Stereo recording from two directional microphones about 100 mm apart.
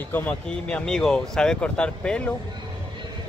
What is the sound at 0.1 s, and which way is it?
Speech, 15° left (ahead or behind).